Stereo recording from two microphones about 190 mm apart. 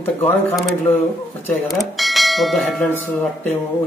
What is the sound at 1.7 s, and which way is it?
Speech, centre (ahead or behind).